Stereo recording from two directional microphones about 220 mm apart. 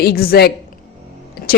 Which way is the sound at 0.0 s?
45° left (ahead or behind).